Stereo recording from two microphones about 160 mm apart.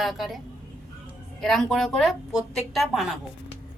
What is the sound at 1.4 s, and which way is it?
A woman's voice, centre (ahead or behind).